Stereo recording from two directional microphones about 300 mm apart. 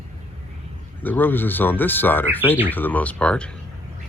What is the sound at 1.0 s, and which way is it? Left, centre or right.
Speech, centre.